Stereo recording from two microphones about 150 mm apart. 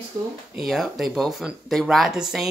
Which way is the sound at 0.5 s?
Centre (ahead or behind).